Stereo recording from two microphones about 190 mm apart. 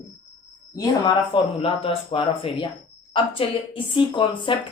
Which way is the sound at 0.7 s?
20° left (ahead or behind).